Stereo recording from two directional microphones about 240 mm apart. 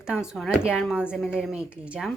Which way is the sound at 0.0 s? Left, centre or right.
Centre.